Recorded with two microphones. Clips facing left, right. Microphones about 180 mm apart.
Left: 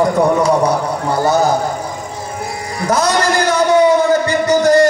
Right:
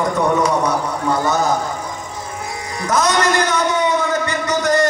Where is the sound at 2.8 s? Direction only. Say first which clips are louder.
Left 2 dB; 30° left (ahead or behind).